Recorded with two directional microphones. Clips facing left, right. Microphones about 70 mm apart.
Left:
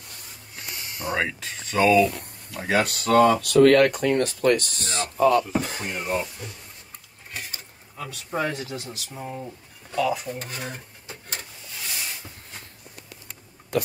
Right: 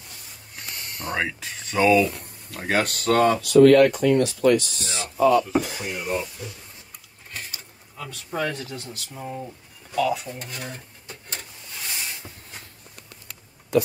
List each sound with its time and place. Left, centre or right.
0.6 s a sound: centre
2.5 s speech: right
3.2 s speech: left
8.4 s speech: centre
9.9 s dishes: centre
10.3 s stir: centre